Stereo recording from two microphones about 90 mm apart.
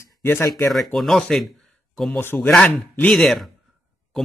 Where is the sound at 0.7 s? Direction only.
Centre (ahead or behind).